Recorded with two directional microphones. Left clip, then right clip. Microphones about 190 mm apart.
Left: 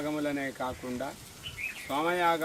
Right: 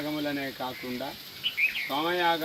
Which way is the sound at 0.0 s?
15° left (ahead or behind).